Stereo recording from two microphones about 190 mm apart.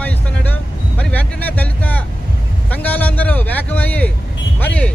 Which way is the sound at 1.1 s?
10° left (ahead or behind).